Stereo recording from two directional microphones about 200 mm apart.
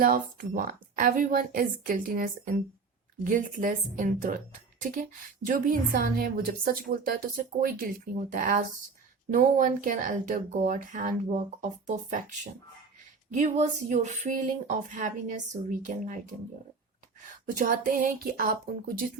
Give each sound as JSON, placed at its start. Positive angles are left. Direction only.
{"t": 0.0, "sound": "a woman's voice", "side_deg": -45}
{"t": 4.8, "sound": "a sound", "side_deg": -40}
{"t": 5.5, "sound": "a woman's voice", "side_deg": -45}
{"t": 17.6, "sound": "a woman's voice", "side_deg": -45}